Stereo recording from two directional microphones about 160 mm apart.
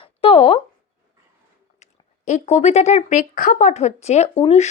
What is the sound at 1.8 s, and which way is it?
Speech, 45° left (ahead or behind).